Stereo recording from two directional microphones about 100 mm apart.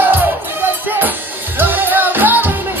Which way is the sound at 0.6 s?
20° right (ahead or behind).